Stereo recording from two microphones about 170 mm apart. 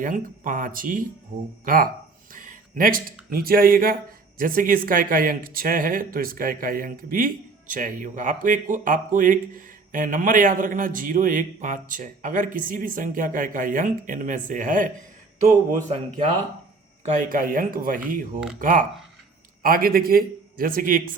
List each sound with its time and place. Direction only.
0.0 s a man's voice: 50° right (ahead or behind)
2.3 s a sound: 50° right (ahead or behind)
3.2 s a man's voice: 60° right (ahead or behind)